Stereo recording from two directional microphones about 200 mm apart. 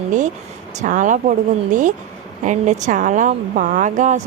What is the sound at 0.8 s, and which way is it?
A woman's voice, 40° right (ahead or behind).